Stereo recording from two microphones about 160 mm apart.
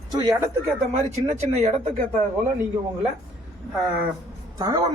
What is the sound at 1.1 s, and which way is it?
Speech, 45° right (ahead or behind).